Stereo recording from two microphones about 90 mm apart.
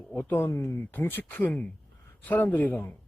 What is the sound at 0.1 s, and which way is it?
Speech, 20° left (ahead or behind).